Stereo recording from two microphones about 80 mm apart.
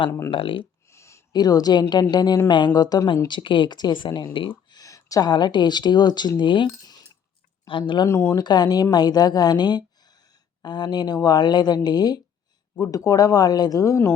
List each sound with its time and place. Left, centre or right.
0.3 s speech: left
0.9 s a sound: left
1.3 s speech: left
2.5 s speech: left
3.2 s speech: left
4.4 s a sound: left
4.8 s a sound: left
5.3 s speech: left
7.7 s speech: left
8.0 s speech: left
8.4 s speech: left
12.8 s speech: left